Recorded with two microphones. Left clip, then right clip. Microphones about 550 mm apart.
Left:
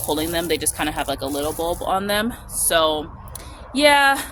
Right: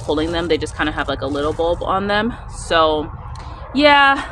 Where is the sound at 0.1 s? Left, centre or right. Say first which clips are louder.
Right 4 dB; left.